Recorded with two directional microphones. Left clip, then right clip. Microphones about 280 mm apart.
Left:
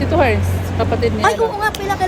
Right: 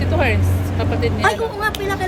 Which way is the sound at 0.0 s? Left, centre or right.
Centre.